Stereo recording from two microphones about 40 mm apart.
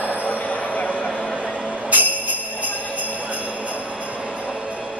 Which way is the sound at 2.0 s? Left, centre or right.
Right.